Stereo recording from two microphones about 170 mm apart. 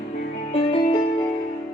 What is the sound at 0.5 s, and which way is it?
Music, 35° left (ahead or behind).